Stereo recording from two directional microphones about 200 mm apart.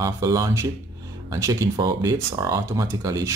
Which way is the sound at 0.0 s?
15° right (ahead or behind).